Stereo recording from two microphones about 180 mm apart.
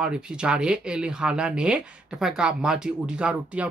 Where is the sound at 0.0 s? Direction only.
5° right (ahead or behind).